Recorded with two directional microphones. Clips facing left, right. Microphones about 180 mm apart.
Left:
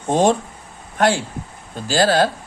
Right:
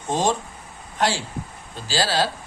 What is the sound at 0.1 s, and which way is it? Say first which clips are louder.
Speech: left 6 dB; 60° left (ahead or behind).